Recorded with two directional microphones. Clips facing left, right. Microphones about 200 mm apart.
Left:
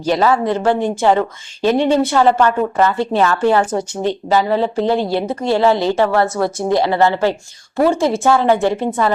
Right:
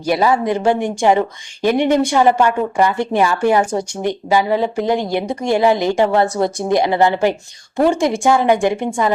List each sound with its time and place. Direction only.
0.0 s a woman's voice: 10° right (ahead or behind)